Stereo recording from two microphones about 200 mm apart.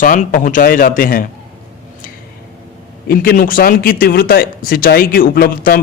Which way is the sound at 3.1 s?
45° left (ahead or behind).